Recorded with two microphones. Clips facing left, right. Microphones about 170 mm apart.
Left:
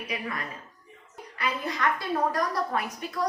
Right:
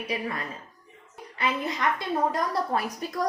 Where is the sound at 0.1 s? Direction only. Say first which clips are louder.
Right 3 dB; 30° right (ahead or behind).